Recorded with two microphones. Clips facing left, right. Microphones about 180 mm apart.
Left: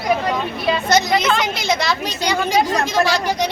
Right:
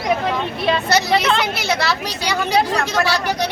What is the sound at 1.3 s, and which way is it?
Speech, 5° right (ahead or behind).